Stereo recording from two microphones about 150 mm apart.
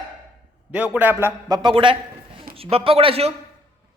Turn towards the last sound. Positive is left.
turn(degrees=-40)  # may be behind; listen again after turning